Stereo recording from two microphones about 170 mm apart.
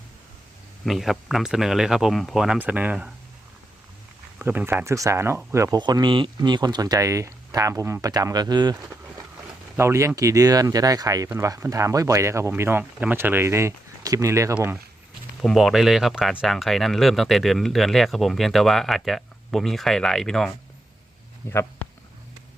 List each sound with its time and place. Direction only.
0.9 s speech: centre (ahead or behind)
4.4 s speech: 10° right (ahead or behind)
15.4 s speech: centre (ahead or behind)
21.5 s speech: 15° left (ahead or behind)